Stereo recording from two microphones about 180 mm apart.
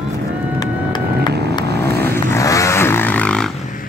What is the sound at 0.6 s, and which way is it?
Vehicle, 25° left (ahead or behind).